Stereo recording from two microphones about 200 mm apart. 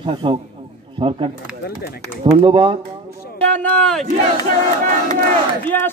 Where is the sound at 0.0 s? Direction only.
25° right (ahead or behind).